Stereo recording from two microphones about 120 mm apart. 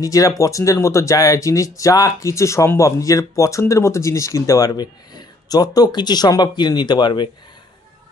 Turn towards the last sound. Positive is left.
turn(degrees=40)  # may be behind; listen again after turning